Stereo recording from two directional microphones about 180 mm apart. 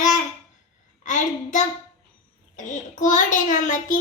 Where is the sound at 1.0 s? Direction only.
45° left (ahead or behind).